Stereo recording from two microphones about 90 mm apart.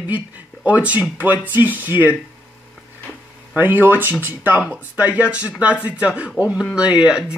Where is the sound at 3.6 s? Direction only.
20° right (ahead or behind).